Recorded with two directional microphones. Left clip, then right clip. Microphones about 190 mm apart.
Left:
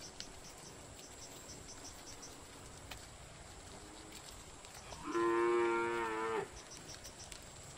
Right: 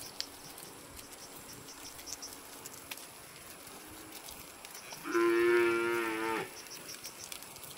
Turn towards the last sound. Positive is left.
turn(degrees=25)  # may be behind; listen again after turning